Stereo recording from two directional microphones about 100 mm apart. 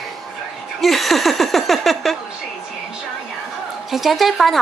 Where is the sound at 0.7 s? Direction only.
Centre (ahead or behind).